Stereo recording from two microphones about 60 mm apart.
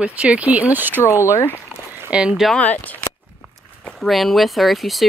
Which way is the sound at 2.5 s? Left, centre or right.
Left.